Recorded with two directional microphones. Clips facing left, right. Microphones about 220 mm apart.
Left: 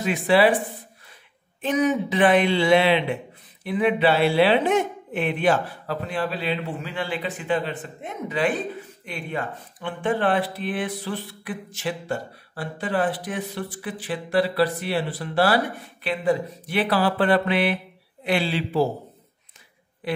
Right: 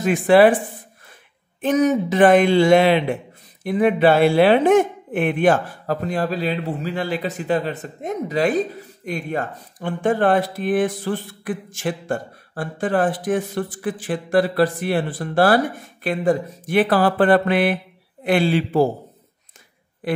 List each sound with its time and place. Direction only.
0.0 s speech: 50° right (ahead or behind)
1.6 s speech: 45° right (ahead or behind)
20.0 s a woman's voice: 45° right (ahead or behind)